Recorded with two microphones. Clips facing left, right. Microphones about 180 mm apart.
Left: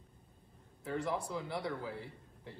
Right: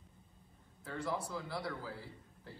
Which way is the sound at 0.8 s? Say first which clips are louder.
Left 3 dB; 20° left (ahead or behind).